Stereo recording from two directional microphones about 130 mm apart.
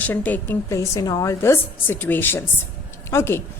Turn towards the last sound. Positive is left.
turn(degrees=20)  # may be behind; listen again after turning